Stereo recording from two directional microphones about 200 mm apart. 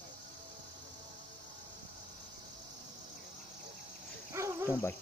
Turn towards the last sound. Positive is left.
turn(degrees=-15)  # may be behind; listen again after turning